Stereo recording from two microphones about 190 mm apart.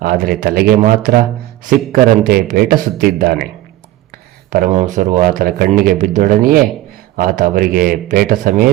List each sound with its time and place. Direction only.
0.0 s speech: 50° right (ahead or behind)